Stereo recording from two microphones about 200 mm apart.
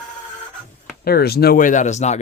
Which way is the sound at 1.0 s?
50° left (ahead or behind).